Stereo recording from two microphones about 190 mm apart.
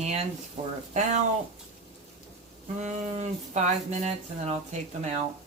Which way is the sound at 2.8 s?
40° right (ahead or behind).